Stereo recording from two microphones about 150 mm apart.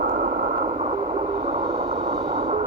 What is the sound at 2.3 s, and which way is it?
Vehicle, 45° right (ahead or behind).